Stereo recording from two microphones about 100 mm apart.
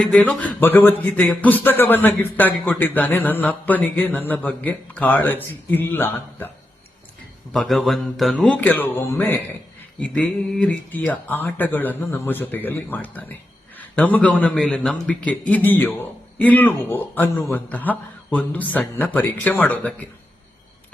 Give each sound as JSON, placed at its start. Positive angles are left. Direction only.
{"t": 0.0, "sound": "speech", "side_deg": 10}
{"t": 7.5, "sound": "speech", "side_deg": 5}